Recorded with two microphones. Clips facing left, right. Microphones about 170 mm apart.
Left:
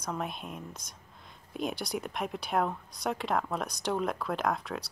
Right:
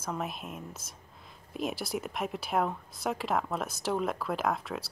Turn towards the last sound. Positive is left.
turn(degrees=0)  # may be behind; listen again after turning